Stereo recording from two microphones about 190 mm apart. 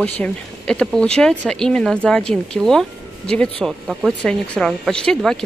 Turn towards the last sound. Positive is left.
turn(degrees=5)  # may be behind; listen again after turning